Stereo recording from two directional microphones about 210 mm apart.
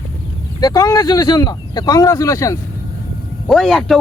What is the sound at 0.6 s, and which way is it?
Speech, 15° left (ahead or behind).